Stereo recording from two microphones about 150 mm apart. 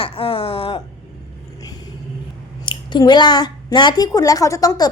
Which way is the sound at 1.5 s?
25° left (ahead or behind).